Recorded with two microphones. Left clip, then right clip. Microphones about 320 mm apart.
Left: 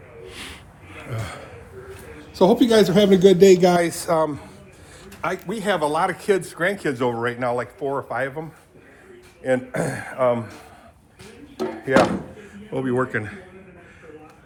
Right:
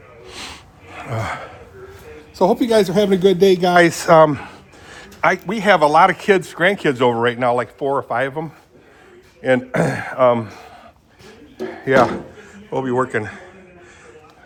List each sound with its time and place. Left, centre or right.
0.3 s gasp: centre
2.3 s a man's voice: centre
3.8 s a man's voice: right
12.7 s a man's voice: centre